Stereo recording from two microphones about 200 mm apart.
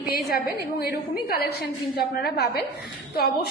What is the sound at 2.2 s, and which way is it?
Speech, 50° left (ahead or behind).